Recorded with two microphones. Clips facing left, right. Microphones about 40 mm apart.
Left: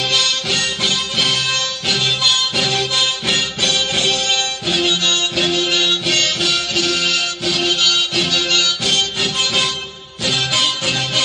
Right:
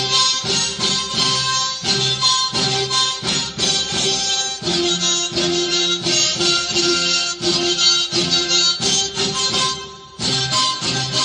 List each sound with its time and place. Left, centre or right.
0.1 s music: left